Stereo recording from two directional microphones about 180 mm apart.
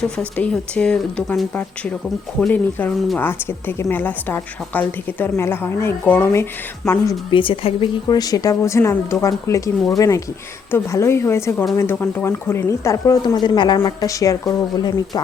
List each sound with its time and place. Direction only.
0.0 s a woman's voice: 5° left (ahead or behind)